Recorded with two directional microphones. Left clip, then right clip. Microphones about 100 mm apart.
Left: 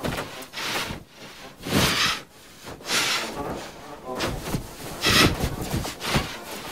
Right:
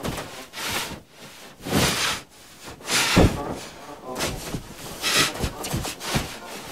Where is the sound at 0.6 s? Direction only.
10° right (ahead or behind).